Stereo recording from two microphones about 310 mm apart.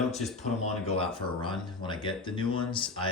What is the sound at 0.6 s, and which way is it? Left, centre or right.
Speech, centre.